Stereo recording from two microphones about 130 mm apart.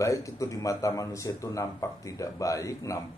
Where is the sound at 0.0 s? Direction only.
25° left (ahead or behind).